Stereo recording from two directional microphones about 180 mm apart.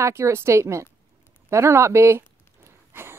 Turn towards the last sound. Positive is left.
turn(degrees=-15)  # may be behind; listen again after turning